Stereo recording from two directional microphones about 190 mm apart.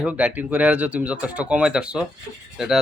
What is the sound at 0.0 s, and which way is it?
Speech, 5° right (ahead or behind).